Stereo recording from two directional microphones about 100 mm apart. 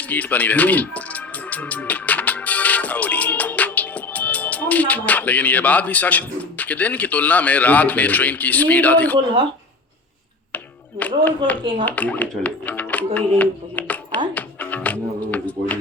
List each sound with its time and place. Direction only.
0.0 s speech: 15° left (ahead or behind)
10.5 s a sound: 15° left (ahead or behind)
11.6 s speech: 55° right (ahead or behind)
11.9 s speech: 15° left (ahead or behind)
14.3 s music: 15° left (ahead or behind)